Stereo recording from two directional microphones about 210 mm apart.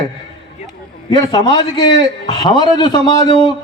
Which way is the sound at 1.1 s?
20° left (ahead or behind).